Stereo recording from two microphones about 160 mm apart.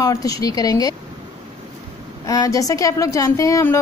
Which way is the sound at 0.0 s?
20° left (ahead or behind).